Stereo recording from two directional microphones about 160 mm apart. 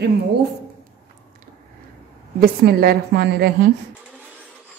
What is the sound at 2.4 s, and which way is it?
A woman's voice, 70° right (ahead or behind).